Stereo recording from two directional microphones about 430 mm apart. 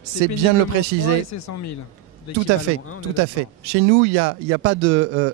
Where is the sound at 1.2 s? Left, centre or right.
Left.